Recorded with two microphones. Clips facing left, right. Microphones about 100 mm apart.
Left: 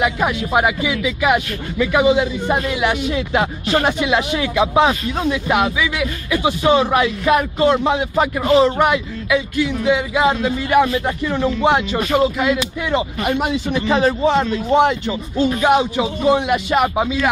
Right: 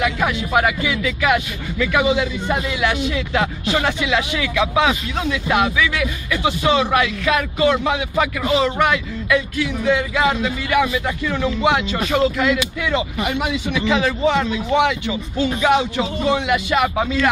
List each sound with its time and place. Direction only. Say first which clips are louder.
0.0 s speech: left 2 dB; 20° left (ahead or behind)
9.3 s speech: left 2 dB; 5° left (ahead or behind)
9.9 s speech: left 2 dB; 20° left (ahead or behind)
12.1 s speech: left 1 dB; 15° left (ahead or behind)
12.5 s speech: left 1 dB; 35° left (ahead or behind)
15.4 s speech: left 2 dB; 20° left (ahead or behind)